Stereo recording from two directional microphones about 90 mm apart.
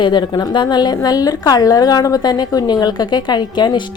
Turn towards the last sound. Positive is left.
turn(degrees=55)  # may be behind; listen again after turning